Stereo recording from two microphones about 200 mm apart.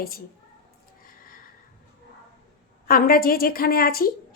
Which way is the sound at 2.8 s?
45° left (ahead or behind).